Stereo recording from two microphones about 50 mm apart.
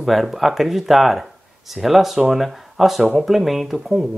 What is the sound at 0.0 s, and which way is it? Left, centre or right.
Speech, centre.